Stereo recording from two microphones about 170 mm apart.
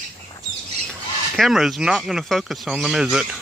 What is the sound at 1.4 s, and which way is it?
Speech, centre (ahead or behind).